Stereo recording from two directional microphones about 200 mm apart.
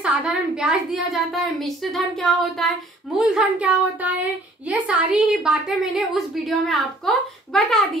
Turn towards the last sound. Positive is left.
turn(degrees=0)  # may be behind; listen again after turning